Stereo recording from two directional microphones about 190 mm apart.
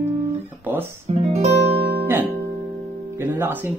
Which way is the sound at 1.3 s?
35° right (ahead or behind).